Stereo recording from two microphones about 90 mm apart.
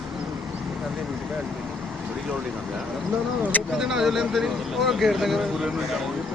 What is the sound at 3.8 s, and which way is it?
Speech, 5° right (ahead or behind).